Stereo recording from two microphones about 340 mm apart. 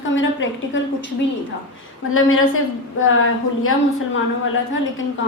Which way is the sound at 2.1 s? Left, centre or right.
Left.